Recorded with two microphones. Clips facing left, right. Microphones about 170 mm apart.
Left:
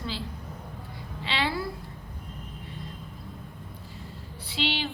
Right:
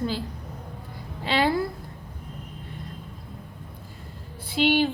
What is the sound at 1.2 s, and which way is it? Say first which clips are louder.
Speech: right 7 dB; 45° right (ahead or behind).